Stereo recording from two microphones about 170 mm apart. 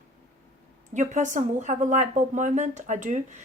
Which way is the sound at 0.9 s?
45° right (ahead or behind).